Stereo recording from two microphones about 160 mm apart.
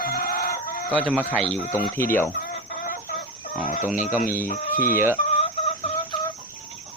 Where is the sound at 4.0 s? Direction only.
50° left (ahead or behind).